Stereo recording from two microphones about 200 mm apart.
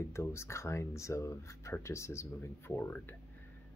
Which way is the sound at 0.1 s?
15° left (ahead or behind).